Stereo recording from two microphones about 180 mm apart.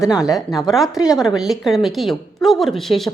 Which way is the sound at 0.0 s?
5° right (ahead or behind).